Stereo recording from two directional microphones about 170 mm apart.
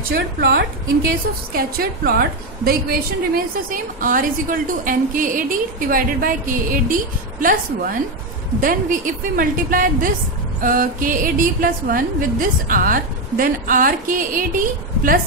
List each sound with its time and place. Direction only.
0.1 s a woman's voice: 70° right (ahead or behind)
3.7 s a woman's voice: 55° right (ahead or behind)